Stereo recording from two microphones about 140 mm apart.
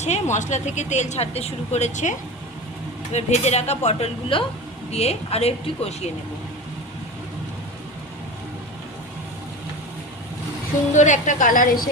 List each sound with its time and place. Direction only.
0.0 s a woman's voice: 55° left (ahead or behind)
10.9 s a woman's voice: 60° left (ahead or behind); by 11.9 s 85° left